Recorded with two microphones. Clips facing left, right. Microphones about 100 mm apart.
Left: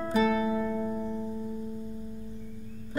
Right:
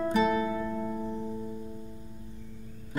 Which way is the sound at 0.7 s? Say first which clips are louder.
Left 2 dB; centre (ahead or behind).